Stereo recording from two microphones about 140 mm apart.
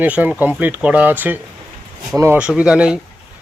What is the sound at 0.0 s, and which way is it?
Speech, 10° right (ahead or behind).